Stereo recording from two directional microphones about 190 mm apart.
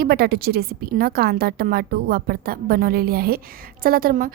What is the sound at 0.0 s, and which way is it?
A woman's voice, 55° right (ahead or behind).